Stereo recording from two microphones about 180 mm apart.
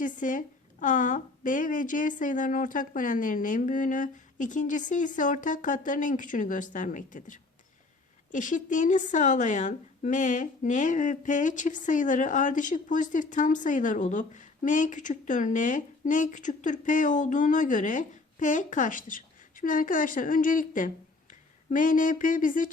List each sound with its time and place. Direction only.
0.0 s a woman's voice: 45° left (ahead or behind)